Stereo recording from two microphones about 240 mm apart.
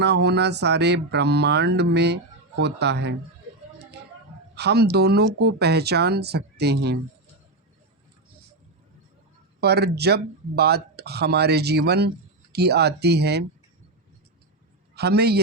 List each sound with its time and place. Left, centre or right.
0.0 s speech: right
4.5 s speech: right
9.6 s speech: right
14.9 s a man's voice: right